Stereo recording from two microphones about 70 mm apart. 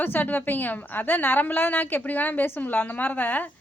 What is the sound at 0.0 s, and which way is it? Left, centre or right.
Speech, left.